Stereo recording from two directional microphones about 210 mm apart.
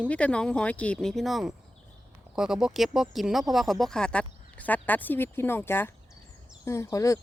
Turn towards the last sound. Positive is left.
turn(degrees=15)  # may be behind; listen again after turning